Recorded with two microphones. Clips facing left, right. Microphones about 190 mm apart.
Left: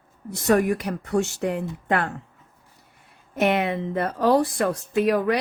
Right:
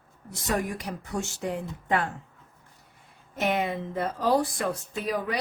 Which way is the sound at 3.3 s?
65° left (ahead or behind).